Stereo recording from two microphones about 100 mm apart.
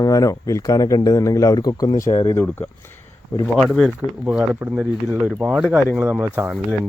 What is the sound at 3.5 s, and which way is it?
Speech, centre (ahead or behind).